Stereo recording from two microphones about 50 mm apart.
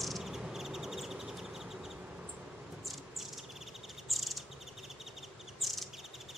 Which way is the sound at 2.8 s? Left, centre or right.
Centre.